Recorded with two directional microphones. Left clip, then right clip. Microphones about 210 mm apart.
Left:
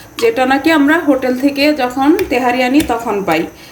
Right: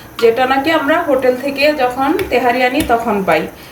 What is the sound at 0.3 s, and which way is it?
A woman's voice, 55° left (ahead or behind).